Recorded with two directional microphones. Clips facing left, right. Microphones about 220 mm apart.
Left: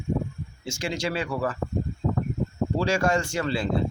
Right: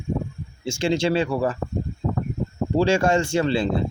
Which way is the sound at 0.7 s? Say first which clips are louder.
Right 8 dB; 25° right (ahead or behind).